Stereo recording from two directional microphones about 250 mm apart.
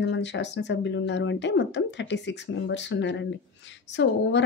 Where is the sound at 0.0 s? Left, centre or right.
Left.